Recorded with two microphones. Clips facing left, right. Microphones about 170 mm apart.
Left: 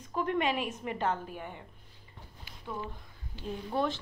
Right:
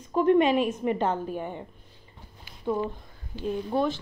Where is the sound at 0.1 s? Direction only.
25° right (ahead or behind).